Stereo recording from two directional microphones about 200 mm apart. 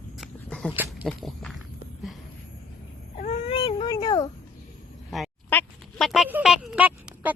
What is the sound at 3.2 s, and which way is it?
Baby cry, 30° left (ahead or behind).